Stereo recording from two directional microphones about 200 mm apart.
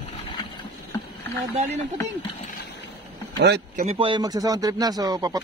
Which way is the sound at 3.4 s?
50° right (ahead or behind).